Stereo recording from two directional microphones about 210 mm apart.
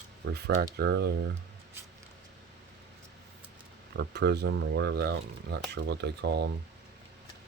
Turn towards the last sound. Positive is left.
turn(degrees=-50)  # may be behind; listen again after turning